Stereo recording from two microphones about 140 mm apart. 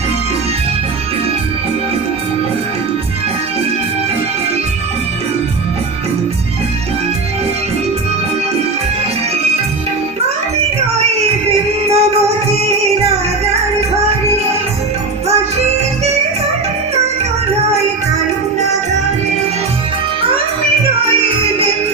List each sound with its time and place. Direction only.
11.0 s music: 45° right (ahead or behind)